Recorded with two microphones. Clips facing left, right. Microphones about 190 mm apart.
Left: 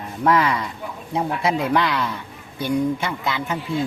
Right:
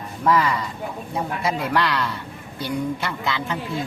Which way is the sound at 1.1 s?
20° left (ahead or behind).